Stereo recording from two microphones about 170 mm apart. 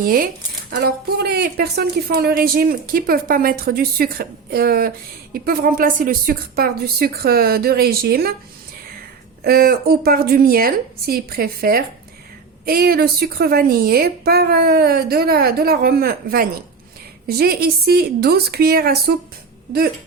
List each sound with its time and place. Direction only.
0.0 s speech: 55° right (ahead or behind)
0.7 s speech: 75° right (ahead or behind)
9.4 s speech: 60° right (ahead or behind)